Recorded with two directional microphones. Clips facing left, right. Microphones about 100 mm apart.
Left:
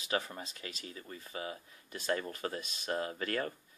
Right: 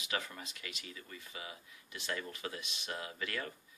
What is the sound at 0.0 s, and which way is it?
Speech, 35° left (ahead or behind).